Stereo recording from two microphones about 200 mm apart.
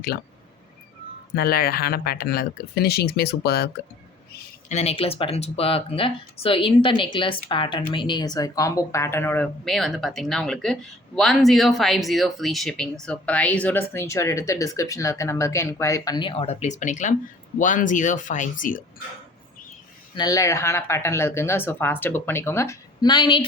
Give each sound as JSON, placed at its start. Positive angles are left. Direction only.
{"t": 1.4, "sound": "speech", "side_deg": 50}
{"t": 4.7, "sound": "speech", "side_deg": 30}
{"t": 20.1, "sound": "speech", "side_deg": 20}